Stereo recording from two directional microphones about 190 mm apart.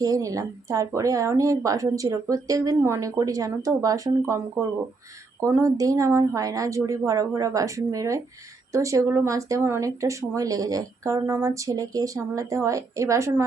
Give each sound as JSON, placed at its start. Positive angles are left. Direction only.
{"t": 0.0, "sound": "speech", "side_deg": -20}